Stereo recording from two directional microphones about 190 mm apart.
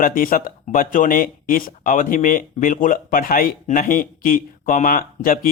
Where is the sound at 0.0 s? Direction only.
50° left (ahead or behind).